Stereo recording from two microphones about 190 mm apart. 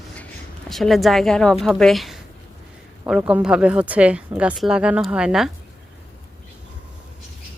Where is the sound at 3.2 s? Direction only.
10° right (ahead or behind).